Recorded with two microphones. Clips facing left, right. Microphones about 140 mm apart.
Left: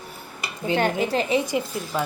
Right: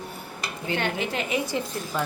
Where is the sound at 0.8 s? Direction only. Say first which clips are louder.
Left 6 dB; 40° left (ahead or behind).